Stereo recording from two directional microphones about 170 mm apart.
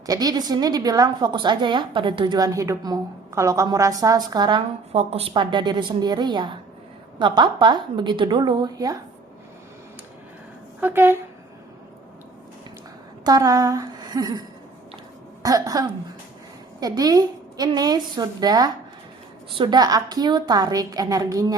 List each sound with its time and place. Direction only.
0.0 s a woman's voice: 20° right (ahead or behind)
4.9 s a woman's voice: 35° right (ahead or behind)
10.8 s speech: 10° right (ahead or behind)
13.2 s a sound: 20° right (ahead or behind)
15.4 s a woman's voice: 20° right (ahead or behind)